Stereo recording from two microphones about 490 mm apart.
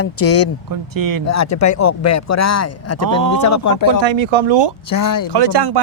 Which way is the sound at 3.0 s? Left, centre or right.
Right.